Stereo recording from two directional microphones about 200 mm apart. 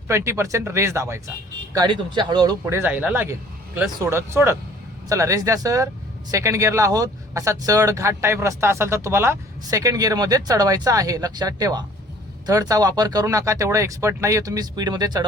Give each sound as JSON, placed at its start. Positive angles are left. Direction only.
{"t": 0.1, "sound": "speech", "side_deg": -15}